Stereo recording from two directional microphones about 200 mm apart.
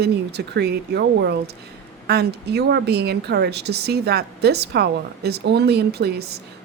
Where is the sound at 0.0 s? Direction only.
55° right (ahead or behind).